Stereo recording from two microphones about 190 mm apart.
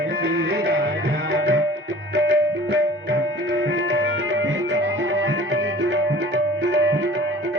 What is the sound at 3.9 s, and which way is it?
Music, 70° right (ahead or behind).